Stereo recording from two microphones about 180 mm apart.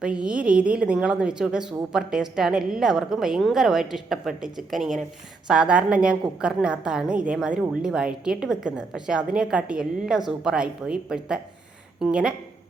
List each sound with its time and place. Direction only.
0.0 s a woman's voice: 5° right (ahead or behind)